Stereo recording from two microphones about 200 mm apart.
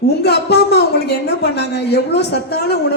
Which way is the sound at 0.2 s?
55° left (ahead or behind).